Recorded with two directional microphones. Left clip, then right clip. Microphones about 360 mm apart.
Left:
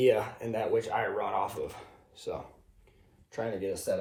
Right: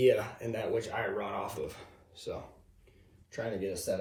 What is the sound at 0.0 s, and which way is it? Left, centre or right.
Speech, centre.